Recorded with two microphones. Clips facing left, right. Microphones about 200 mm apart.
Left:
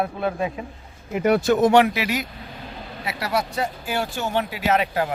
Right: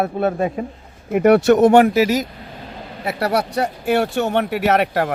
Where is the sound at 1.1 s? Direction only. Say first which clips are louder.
Right 6 dB; 60° right (ahead or behind); by 2.3 s 40° right (ahead or behind).